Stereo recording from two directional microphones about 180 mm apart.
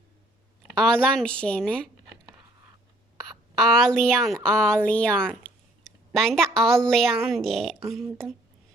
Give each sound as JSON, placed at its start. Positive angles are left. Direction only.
{"t": 0.8, "sound": "a woman's voice", "side_deg": 5}
{"t": 3.2, "sound": "a woman's voice", "side_deg": 0}